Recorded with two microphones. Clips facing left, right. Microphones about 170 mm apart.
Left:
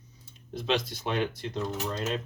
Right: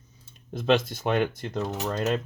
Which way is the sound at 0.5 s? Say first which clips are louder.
Right 6 dB; 50° right (ahead or behind).